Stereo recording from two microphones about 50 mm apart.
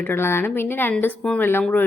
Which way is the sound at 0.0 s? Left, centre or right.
Left.